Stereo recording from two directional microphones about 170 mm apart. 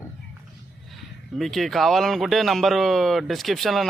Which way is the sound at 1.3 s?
Centre (ahead or behind).